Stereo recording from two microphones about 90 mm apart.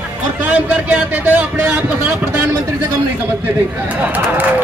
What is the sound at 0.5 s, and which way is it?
A man's voice, 15° right (ahead or behind).